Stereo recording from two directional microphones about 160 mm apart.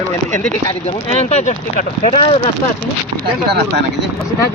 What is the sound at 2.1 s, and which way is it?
Speech, 35° left (ahead or behind).